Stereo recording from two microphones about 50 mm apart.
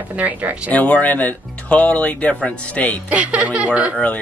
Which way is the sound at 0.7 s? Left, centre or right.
Left.